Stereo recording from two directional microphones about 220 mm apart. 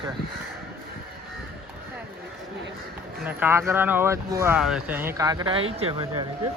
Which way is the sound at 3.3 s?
10° right (ahead or behind).